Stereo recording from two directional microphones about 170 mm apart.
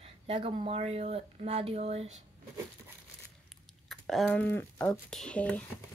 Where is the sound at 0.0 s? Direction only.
35° right (ahead or behind).